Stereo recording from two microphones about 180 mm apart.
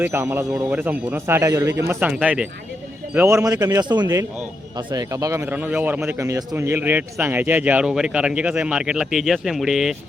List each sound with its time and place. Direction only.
0.0 s a man's voice: 15° right (ahead or behind)